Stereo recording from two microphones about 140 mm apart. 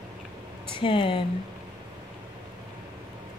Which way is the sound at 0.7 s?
40° left (ahead or behind).